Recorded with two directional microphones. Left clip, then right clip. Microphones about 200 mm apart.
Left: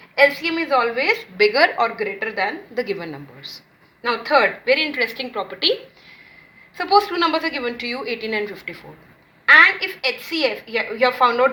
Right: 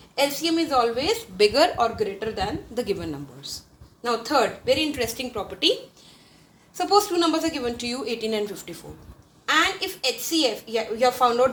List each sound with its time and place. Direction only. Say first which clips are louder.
0.2 s a woman's voice: left 6 dB; 35° right (ahead or behind)
4.0 s a woman's voice: left 5 dB; 30° right (ahead or behind)
6.7 s a woman's voice: left 3 dB; 35° right (ahead or behind)